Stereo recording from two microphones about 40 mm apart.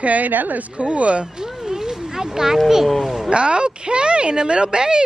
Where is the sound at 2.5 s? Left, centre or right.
Centre.